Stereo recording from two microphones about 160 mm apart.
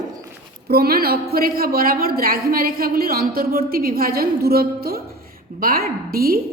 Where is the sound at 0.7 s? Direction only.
70° right (ahead or behind).